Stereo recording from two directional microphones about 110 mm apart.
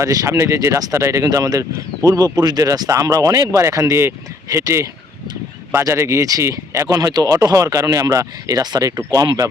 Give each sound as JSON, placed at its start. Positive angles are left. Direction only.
{"t": 0.0, "sound": "speech", "side_deg": -30}